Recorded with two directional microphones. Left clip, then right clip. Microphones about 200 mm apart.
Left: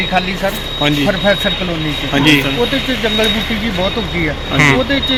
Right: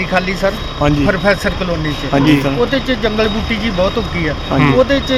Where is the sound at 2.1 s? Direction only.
40° right (ahead or behind).